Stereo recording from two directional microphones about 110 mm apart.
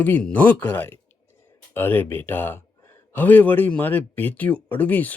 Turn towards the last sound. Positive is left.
turn(degrees=15)  # may be behind; listen again after turning